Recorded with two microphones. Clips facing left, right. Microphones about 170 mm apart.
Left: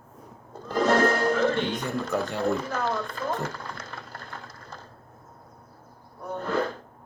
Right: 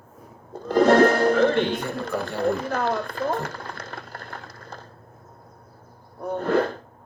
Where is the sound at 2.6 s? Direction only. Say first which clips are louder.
Right 3 dB; 60° right (ahead or behind).